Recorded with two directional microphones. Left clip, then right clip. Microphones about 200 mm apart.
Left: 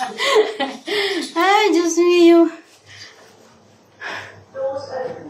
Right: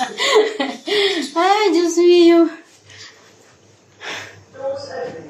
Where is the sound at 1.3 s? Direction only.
10° right (ahead or behind).